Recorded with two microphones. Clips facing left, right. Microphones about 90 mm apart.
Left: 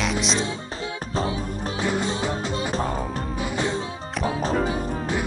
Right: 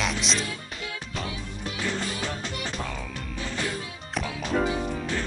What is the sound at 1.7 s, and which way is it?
Music, 25° left (ahead or behind).